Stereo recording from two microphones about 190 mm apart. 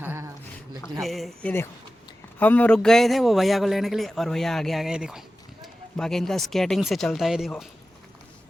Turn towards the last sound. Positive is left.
turn(degrees=0)  # may be behind; listen again after turning